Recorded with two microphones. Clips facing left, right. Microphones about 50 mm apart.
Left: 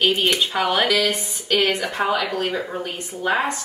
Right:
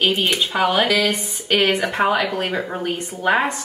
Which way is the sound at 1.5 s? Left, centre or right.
Centre.